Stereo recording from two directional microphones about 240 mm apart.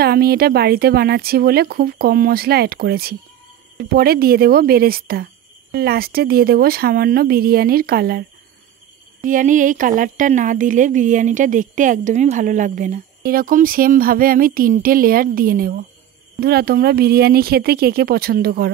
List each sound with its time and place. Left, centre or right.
0.0 s a woman's voice: right